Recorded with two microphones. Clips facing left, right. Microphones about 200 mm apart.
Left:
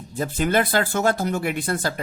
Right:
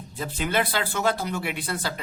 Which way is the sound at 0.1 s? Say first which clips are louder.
Left 6 dB; 45° left (ahead or behind).